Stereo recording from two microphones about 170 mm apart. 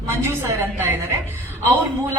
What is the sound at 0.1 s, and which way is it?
Speech, 15° right (ahead or behind).